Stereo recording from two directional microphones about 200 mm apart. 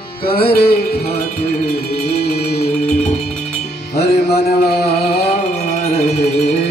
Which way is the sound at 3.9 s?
55° left (ahead or behind).